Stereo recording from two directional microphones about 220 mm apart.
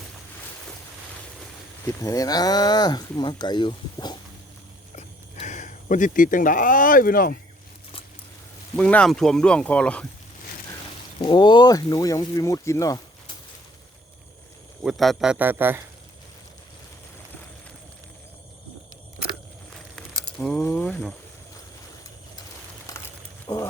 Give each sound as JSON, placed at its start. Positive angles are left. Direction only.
{"t": 2.0, "sound": "speech", "side_deg": 15}
{"t": 4.9, "sound": "sheep", "side_deg": 30}
{"t": 8.7, "sound": "speech", "side_deg": 5}
{"t": 11.2, "sound": "speech", "side_deg": 20}
{"t": 14.8, "sound": "speech", "side_deg": 0}
{"t": 20.0, "sound": "speech", "side_deg": 5}
{"t": 22.9, "sound": "a sound", "side_deg": 15}